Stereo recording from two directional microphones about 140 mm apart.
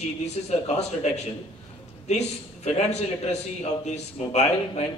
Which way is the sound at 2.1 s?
50° left (ahead or behind).